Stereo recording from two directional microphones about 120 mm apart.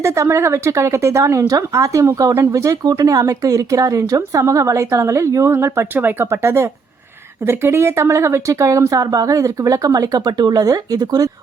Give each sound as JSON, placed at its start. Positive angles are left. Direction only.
{"t": 0.0, "sound": "speech", "side_deg": -25}